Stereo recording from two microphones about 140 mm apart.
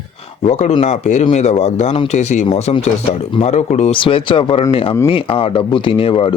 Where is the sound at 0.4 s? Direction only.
50° left (ahead or behind).